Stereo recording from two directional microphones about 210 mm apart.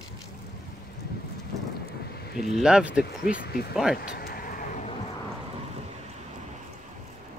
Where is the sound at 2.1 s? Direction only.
50° left (ahead or behind).